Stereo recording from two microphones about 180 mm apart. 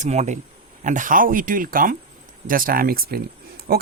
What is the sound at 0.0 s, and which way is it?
Speech, 40° right (ahead or behind).